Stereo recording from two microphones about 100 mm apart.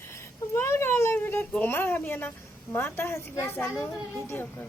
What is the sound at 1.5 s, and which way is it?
A woman's voice, 20° left (ahead or behind).